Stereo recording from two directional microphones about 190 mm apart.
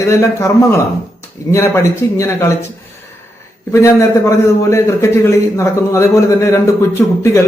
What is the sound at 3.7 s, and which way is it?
A man's voice, 15° left (ahead or behind).